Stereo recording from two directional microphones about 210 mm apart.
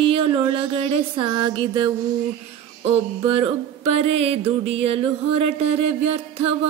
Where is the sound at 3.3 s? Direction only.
30° right (ahead or behind).